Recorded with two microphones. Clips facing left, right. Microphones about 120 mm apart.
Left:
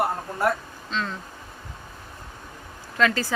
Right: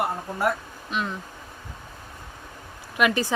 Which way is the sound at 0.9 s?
15° right (ahead or behind).